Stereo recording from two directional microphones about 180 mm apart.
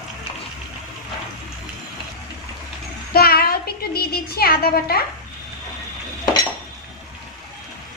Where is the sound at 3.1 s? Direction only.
60° left (ahead or behind).